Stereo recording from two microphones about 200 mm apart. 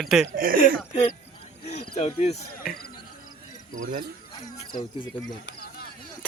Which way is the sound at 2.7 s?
5° left (ahead or behind).